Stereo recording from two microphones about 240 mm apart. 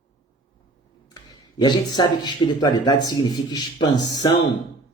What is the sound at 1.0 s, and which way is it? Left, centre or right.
Speech, centre.